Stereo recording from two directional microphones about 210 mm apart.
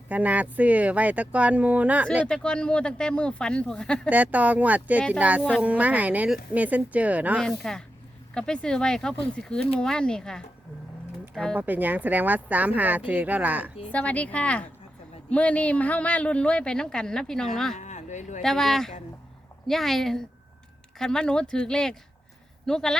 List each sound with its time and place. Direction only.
0.1 s speech: 5° right (ahead or behind)
2.2 s a woman's voice: 5° left (ahead or behind)
4.1 s speech: 5° right (ahead or behind)
5.4 s a woman's voice: 5° left (ahead or behind)
5.6 s a woman's voice: 5° right (ahead or behind)
11.5 s speech: 10° right (ahead or behind)
13.9 s a woman's voice: 5° left (ahead or behind)
17.7 s speech: 35° left (ahead or behind)
18.4 s a woman's voice: centre (ahead or behind)